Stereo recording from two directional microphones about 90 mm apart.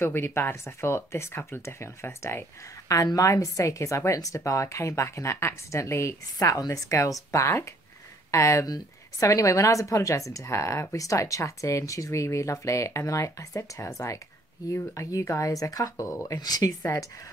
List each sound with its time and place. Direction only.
0.0 s speech: 25° left (ahead or behind)
2.9 s a woman's voice: 40° left (ahead or behind)
16.3 s speech: 45° left (ahead or behind)